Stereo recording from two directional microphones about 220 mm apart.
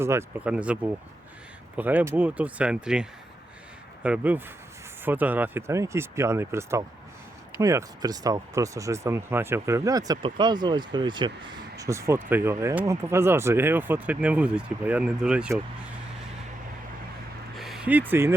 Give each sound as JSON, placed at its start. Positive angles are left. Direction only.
{"t": 0.0, "sound": "speech", "side_deg": -10}
{"t": 17.6, "sound": "speech", "side_deg": 0}